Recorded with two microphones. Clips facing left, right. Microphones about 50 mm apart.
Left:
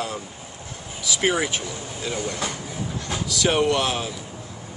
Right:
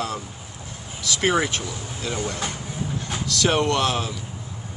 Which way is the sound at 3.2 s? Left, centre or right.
Centre.